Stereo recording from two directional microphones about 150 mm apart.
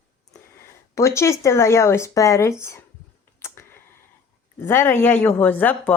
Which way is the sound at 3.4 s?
15° left (ahead or behind).